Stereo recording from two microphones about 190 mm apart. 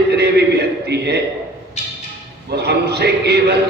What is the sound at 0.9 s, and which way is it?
Speech, 60° right (ahead or behind).